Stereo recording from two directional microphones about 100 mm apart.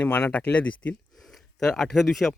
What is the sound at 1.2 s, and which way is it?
Speech, 5° left (ahead or behind).